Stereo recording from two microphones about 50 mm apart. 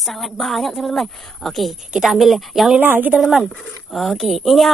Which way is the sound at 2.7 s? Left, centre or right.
Right.